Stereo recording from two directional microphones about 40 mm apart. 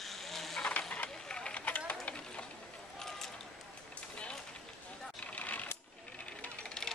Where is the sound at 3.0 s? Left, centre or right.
Centre.